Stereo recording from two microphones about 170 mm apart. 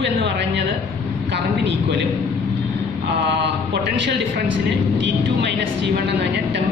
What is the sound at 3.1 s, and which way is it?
A woman's voice, 85° right.